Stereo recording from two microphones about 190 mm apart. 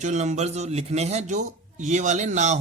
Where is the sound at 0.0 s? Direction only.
40° right (ahead or behind).